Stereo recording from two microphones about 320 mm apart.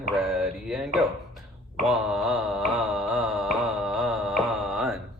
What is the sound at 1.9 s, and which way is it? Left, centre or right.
Music, centre.